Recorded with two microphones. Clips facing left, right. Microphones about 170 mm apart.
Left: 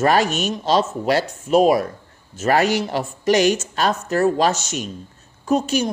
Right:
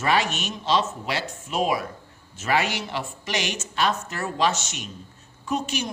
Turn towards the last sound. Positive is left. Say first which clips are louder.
# left 8 dB
turn(degrees=40)  # may be behind; listen again after turning